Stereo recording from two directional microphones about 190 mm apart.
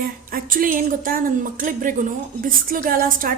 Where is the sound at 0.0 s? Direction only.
50° right (ahead or behind).